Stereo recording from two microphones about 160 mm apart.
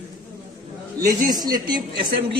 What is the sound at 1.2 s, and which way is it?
Speech, 25° right (ahead or behind).